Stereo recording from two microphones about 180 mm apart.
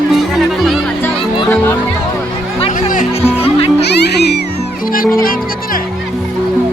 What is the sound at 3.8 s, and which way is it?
Music, 65° left (ahead or behind).